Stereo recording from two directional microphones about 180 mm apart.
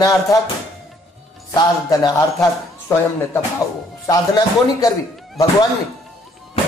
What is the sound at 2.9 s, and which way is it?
A man's voice, 15° left (ahead or behind).